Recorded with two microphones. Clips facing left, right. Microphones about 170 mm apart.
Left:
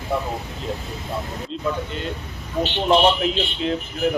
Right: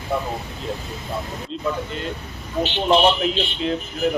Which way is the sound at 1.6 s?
Centre (ahead or behind).